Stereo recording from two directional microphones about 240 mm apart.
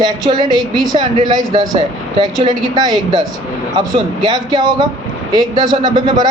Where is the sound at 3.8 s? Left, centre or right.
Centre.